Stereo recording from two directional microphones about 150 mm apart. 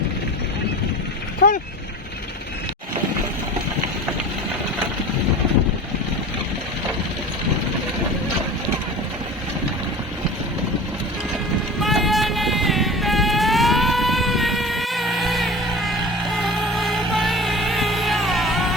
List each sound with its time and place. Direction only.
1.4 s speech: 70° left (ahead or behind)
11.8 s music: centre (ahead or behind)